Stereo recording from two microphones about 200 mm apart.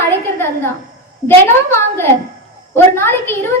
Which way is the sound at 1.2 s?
10° left (ahead or behind).